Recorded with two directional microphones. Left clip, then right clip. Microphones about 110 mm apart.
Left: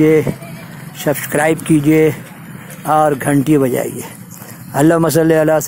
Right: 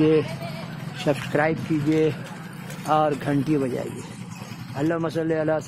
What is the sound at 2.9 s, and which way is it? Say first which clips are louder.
Speech: left 9 dB; 45° left (ahead or behind).